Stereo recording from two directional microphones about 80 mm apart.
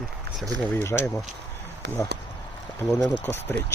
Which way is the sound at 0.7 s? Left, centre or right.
Left.